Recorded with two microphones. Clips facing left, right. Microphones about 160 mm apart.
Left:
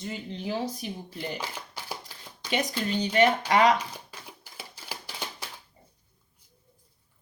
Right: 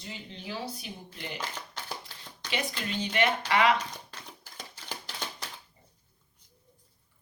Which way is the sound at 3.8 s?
10° left (ahead or behind).